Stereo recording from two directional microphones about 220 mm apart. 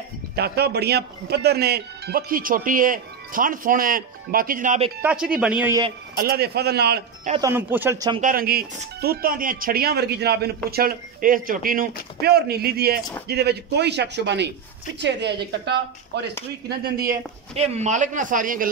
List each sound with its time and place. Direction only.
0.4 s a man's voice: 45° right (ahead or behind); by 4.9 s 30° right (ahead or behind)
5.0 s a man's voice: 5° right (ahead or behind)
6.1 s speech: 45° right (ahead or behind)
7.3 s speech: 10° right (ahead or behind)
8.2 s speech: 40° right (ahead or behind)
17.6 s a man's voice: 30° right (ahead or behind)